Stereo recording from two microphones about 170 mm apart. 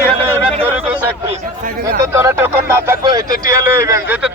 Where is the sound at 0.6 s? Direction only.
10° right (ahead or behind).